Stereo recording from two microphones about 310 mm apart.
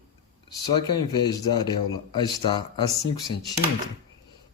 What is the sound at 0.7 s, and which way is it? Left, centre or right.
A man's voice, centre.